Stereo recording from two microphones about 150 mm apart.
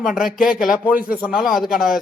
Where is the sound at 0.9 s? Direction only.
75° left (ahead or behind).